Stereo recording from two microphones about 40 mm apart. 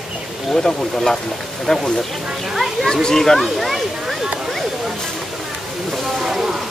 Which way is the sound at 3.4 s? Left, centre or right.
Centre.